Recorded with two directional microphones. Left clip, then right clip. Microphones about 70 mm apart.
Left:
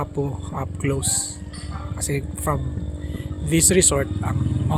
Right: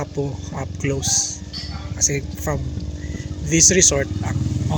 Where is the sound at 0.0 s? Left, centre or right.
Left.